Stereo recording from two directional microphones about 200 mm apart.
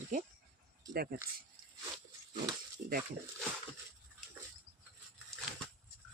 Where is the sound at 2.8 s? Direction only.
50° right (ahead or behind).